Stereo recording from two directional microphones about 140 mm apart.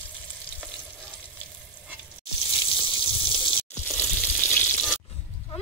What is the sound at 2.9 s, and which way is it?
Water, 40° left (ahead or behind).